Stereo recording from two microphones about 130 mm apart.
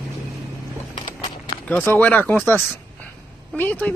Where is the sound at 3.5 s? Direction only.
15° left (ahead or behind).